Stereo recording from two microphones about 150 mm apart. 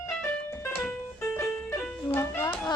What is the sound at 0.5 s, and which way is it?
Music, 15° left (ahead or behind).